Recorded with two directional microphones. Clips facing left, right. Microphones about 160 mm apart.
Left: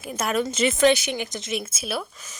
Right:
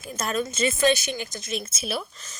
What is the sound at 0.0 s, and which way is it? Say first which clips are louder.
Speech: left 3 dB; 15° left (ahead or behind).